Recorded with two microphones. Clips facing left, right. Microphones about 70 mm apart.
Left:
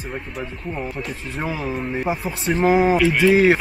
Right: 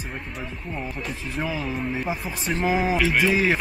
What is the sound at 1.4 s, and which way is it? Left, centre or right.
Speech, left.